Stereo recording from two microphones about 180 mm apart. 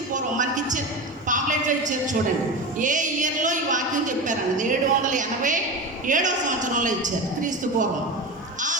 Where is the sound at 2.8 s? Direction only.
45° right (ahead or behind).